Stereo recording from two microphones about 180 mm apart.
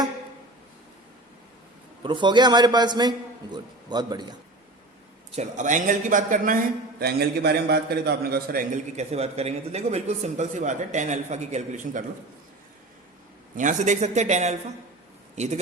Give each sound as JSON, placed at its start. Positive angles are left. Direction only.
{"t": 2.0, "sound": "a man's voice", "side_deg": -25}
{"t": 5.3, "sound": "a man's voice", "side_deg": -40}
{"t": 7.0, "sound": "a man's voice", "side_deg": -60}
{"t": 13.6, "sound": "speech", "side_deg": -45}